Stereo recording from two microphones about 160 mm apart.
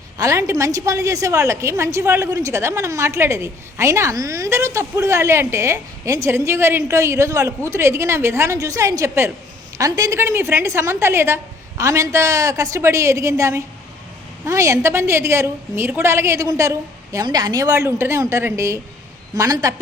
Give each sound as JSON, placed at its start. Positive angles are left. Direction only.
{"t": 0.2, "sound": "a woman's voice", "side_deg": -20}